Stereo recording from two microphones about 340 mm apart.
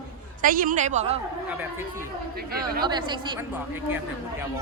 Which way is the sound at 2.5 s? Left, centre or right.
Right.